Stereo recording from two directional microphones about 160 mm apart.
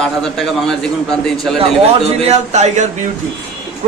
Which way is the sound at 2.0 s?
40° right (ahead or behind).